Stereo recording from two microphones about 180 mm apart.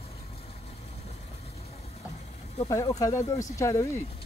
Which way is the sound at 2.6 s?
20° left (ahead or behind).